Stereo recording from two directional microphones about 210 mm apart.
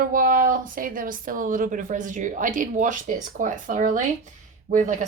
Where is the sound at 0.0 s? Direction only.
40° right (ahead or behind).